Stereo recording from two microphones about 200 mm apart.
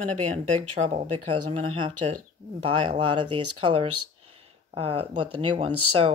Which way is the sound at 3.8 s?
90° right.